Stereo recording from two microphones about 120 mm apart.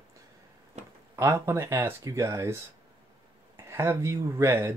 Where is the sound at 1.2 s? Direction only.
25° right (ahead or behind).